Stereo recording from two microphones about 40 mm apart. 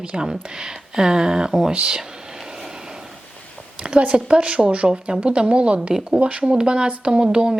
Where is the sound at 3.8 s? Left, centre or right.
Right.